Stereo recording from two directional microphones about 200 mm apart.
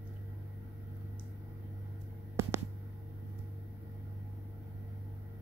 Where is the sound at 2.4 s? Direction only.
10° right (ahead or behind).